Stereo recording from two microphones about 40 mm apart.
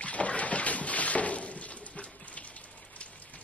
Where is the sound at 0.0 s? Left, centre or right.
Left.